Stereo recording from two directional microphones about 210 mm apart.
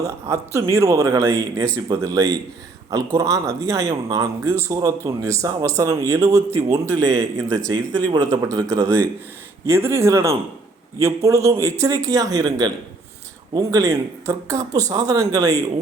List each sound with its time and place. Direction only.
0.0 s speech: 15° right (ahead or behind)